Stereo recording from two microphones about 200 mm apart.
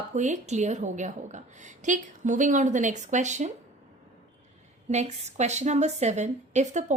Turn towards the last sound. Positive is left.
turn(degrees=-35)  # may be behind; listen again after turning